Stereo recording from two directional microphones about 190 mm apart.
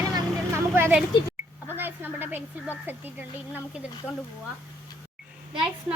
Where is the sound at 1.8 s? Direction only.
10° right (ahead or behind).